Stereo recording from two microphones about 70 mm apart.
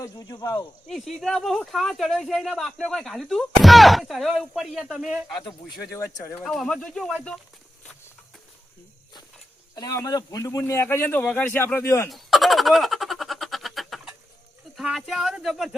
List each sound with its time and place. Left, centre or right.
0.2 s speech: left
0.9 s speech: centre
6.4 s speech: centre
9.7 s speech: left
10.4 s a man's voice: left
10.8 s speech: left
12.0 s a sound: centre
14.9 s speech: centre